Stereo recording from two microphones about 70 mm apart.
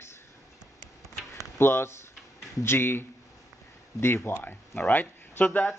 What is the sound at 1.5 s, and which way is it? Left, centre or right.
Speech, left.